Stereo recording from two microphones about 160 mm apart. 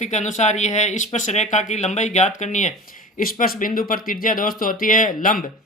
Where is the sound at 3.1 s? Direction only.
60° left (ahead or behind).